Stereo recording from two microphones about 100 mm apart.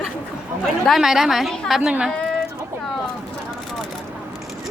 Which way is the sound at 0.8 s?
Centre (ahead or behind).